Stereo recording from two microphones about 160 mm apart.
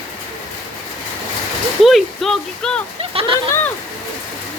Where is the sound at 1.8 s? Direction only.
Centre (ahead or behind).